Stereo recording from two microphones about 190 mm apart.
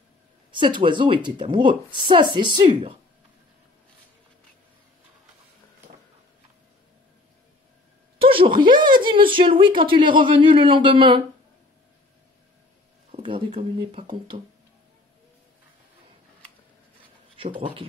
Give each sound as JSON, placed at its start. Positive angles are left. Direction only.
{"t": 0.5, "sound": "a woman's voice", "side_deg": -25}
{"t": 8.2, "sound": "a sound", "side_deg": -25}
{"t": 9.3, "sound": "a woman's voice", "side_deg": -25}
{"t": 13.1, "sound": "a sound", "side_deg": -25}
{"t": 14.0, "sound": "a woman's voice", "side_deg": -30}
{"t": 17.4, "sound": "a woman's voice", "side_deg": -25}